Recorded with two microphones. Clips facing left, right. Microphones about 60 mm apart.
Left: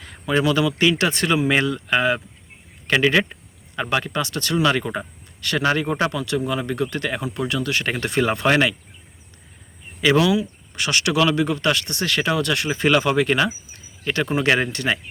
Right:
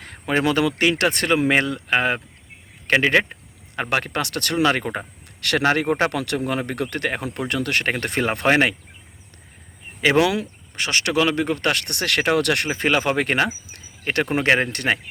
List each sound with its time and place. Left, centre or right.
0.0 s speech: right
3.8 s speech: right
4.6 s speech: right
5.4 s speech: right
8.0 s speech: right
10.0 s speech: right
12.6 s speech: right
14.4 s speech: right
14.7 s speech: right